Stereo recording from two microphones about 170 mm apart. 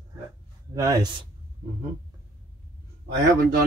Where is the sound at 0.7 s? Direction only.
20° right (ahead or behind).